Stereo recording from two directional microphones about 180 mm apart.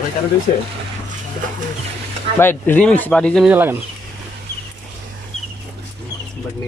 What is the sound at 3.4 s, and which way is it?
Speech, 10° right (ahead or behind).